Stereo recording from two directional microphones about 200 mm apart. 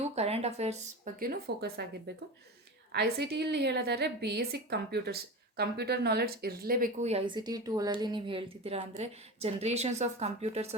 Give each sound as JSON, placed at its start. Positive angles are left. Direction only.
{"t": 0.2, "sound": "a sound", "side_deg": -30}
{"t": 1.2, "sound": "speech", "side_deg": -50}
{"t": 2.9, "sound": "a woman's voice", "side_deg": -55}